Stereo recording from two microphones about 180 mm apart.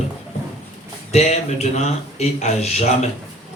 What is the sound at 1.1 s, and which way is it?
A man's voice, 40° left (ahead or behind).